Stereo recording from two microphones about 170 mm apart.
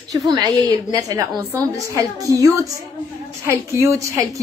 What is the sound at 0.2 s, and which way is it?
A woman's voice, 20° right (ahead or behind).